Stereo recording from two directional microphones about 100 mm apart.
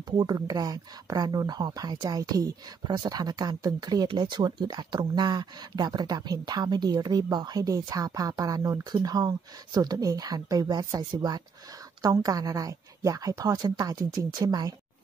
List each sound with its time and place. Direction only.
0.1 s speech: 45° right (ahead or behind)